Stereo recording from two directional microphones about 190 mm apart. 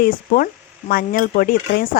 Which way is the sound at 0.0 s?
50° left (ahead or behind).